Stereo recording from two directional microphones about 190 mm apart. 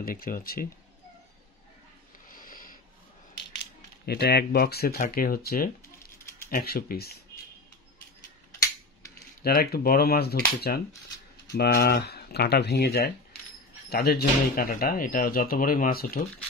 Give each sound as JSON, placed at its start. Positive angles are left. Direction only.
{"t": 0.0, "sound": "speech", "side_deg": 50}
{"t": 2.2, "sound": "a sound", "side_deg": 45}
{"t": 3.3, "sound": "speech", "side_deg": 60}
{"t": 9.4, "sound": "speech", "side_deg": 55}